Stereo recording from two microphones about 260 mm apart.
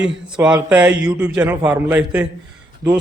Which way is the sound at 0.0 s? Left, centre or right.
Centre.